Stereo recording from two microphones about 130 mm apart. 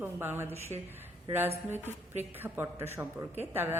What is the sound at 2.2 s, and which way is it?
Speech, 15° right (ahead or behind).